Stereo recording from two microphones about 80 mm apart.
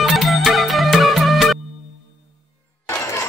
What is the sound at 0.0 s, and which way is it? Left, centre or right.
Music, centre.